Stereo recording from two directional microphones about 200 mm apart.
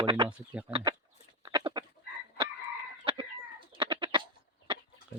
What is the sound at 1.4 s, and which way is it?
Duck, 20° right (ahead or behind).